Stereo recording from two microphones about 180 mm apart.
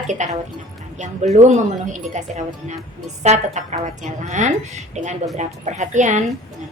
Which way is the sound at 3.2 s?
40° right (ahead or behind).